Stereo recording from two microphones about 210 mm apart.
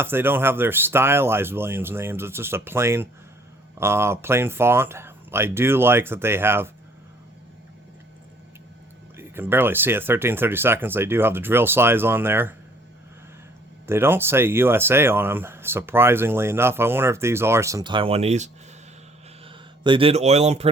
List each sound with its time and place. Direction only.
0.0 s speech: 10° right (ahead or behind)
9.1 s speech: 10° right (ahead or behind)
13.8 s speech: 10° right (ahead or behind); by 20.7 s 30° right (ahead or behind)